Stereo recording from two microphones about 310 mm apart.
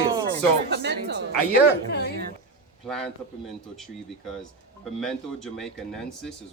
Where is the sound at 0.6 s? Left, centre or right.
Right.